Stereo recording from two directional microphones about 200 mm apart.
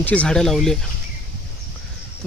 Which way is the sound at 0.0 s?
5° left (ahead or behind).